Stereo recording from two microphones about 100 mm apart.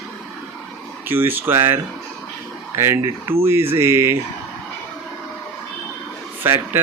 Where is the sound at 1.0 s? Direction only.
20° right (ahead or behind).